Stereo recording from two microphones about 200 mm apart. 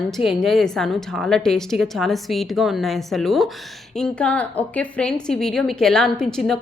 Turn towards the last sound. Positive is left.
turn(degrees=0)  # may be behind; listen again after turning